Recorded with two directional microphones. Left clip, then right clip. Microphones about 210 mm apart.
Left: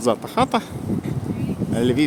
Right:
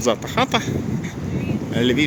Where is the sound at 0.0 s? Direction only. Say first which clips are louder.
Even; 10° left (ahead or behind).